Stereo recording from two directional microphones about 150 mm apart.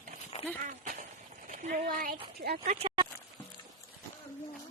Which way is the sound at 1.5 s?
55° right (ahead or behind).